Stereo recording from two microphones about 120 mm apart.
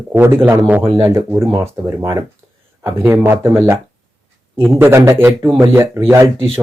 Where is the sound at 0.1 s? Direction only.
20° right (ahead or behind).